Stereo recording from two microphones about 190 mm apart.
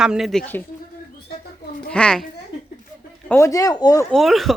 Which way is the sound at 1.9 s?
5° left (ahead or behind).